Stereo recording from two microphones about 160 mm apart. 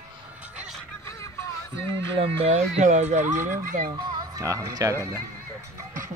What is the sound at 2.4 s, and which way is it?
Speech, 40° right (ahead or behind).